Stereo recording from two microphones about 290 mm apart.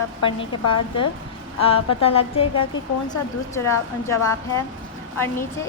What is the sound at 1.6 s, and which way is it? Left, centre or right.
A woman's voice, centre.